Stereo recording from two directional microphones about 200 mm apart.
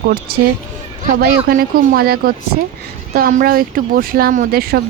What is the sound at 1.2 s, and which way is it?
Speech, 45° right (ahead or behind).